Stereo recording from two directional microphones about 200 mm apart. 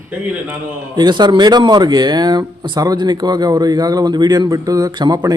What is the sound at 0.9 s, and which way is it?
Speech, 20° right (ahead or behind).